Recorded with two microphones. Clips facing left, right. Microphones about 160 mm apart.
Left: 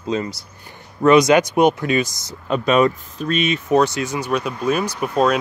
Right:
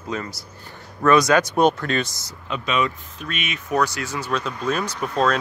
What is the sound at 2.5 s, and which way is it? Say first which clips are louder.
Speech: left 8 dB; 45° left (ahead or behind).